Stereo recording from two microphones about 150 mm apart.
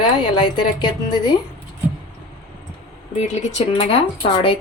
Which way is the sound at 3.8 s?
40° left (ahead or behind).